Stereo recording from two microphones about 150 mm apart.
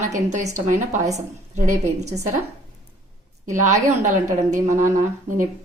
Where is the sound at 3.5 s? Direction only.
55° right (ahead or behind).